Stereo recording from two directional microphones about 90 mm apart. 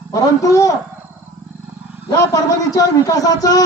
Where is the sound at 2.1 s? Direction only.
40° left (ahead or behind).